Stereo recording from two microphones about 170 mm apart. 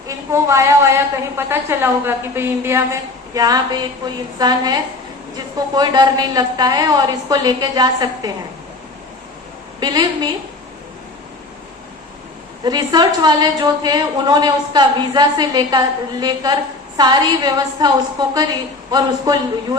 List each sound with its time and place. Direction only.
0.3 s a woman's voice: 15° right (ahead or behind)
9.8 s a woman's voice: 25° right (ahead or behind)
12.6 s a woman's voice: 25° right (ahead or behind)